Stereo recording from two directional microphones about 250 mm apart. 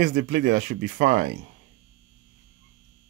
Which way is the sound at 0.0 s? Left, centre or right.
Right.